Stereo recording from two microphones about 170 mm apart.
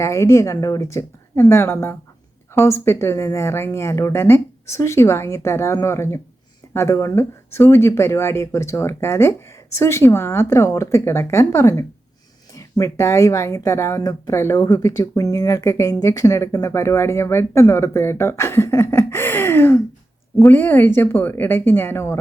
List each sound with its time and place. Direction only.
0.0 s speech: 15° left (ahead or behind)